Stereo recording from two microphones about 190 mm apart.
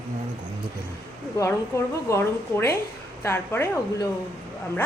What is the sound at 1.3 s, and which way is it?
A woman's voice, 15° left (ahead or behind).